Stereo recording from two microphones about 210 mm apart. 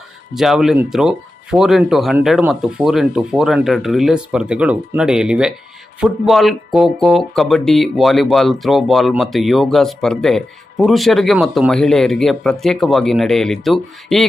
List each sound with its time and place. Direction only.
0.3 s speech: centre (ahead or behind)